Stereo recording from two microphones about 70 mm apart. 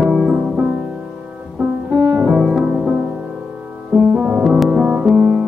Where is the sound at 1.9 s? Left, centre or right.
Right.